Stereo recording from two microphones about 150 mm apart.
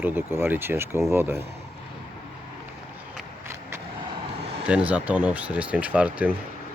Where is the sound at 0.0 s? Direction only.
15° right (ahead or behind).